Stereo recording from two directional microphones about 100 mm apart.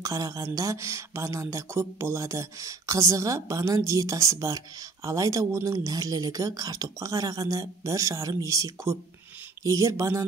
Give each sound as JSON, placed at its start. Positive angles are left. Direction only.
{"t": 0.0, "sound": "speech", "side_deg": -35}